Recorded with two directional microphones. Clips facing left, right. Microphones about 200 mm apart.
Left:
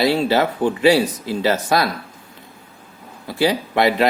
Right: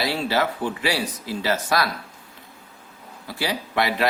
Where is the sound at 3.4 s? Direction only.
25° left (ahead or behind).